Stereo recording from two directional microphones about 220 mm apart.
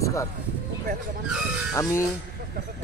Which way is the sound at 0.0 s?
15° left (ahead or behind).